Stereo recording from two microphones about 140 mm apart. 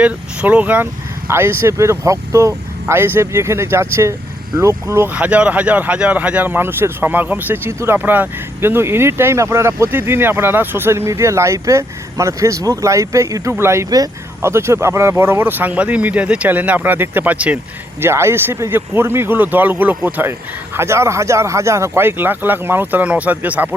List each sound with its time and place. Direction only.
0.0 s speech: 10° right (ahead or behind)